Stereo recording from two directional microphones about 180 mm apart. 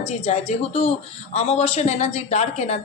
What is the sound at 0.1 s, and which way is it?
Speech, 35° left (ahead or behind).